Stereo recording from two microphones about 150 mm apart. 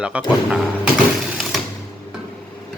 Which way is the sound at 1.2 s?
Centre (ahead or behind).